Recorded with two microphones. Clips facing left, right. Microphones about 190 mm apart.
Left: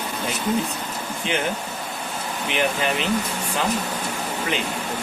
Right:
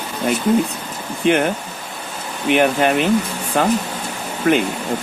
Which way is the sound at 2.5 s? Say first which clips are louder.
Right 9 dB; 55° right (ahead or behind).